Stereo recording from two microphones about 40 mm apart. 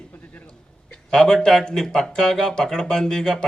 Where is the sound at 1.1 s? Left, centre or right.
Centre.